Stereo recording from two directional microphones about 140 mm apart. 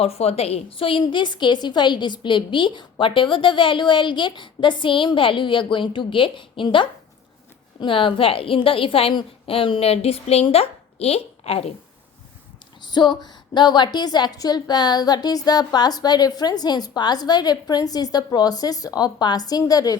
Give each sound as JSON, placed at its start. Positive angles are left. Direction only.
{"t": 0.0, "sound": "a woman's voice", "side_deg": 45}
{"t": 12.8, "sound": "a woman's voice", "side_deg": 30}